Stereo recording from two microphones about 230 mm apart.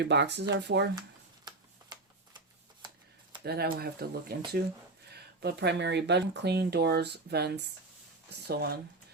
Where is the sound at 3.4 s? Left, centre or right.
Right.